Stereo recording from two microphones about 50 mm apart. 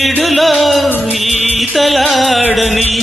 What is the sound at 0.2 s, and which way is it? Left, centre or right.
Music, centre.